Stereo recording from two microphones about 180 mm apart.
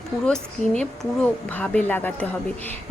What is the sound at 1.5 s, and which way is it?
Speech, 10° left (ahead or behind).